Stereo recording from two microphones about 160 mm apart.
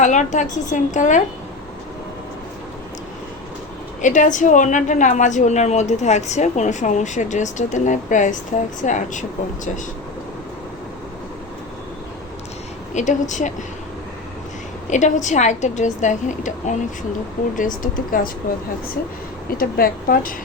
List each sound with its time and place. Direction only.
0.0 s a woman's voice: 50° left (ahead or behind)
4.0 s a woman's voice: 50° left (ahead or behind)
12.9 s a woman's voice: 50° left (ahead or behind)
14.8 s a woman's voice: 50° left (ahead or behind)
19.5 s a woman's voice: 65° left (ahead or behind)